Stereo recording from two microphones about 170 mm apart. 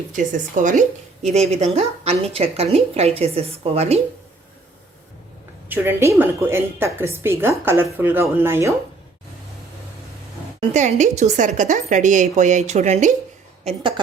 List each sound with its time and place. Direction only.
0.1 s speech: 50° right (ahead or behind)
5.6 s a woman's voice: 10° right (ahead or behind)
10.8 s a woman's voice: 45° right (ahead or behind)
13.7 s a sound: 30° right (ahead or behind)